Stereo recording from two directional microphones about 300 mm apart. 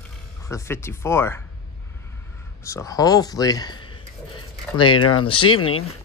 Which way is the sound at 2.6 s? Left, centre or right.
Centre.